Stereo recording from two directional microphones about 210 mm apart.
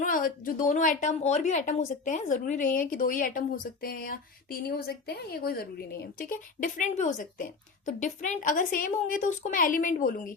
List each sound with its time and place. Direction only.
0.0 s a woman's voice: 40° left (ahead or behind)